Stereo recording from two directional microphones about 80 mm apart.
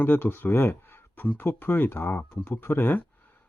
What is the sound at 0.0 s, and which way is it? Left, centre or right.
Speech, left.